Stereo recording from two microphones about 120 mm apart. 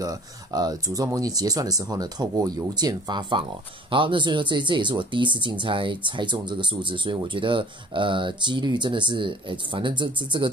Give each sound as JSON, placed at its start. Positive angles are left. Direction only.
{"t": 0.0, "sound": "speech", "side_deg": -30}